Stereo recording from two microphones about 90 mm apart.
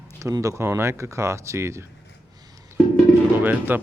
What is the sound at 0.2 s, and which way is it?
Speech, 35° right (ahead or behind).